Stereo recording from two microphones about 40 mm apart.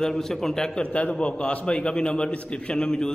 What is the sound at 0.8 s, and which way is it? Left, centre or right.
A man's voice, left.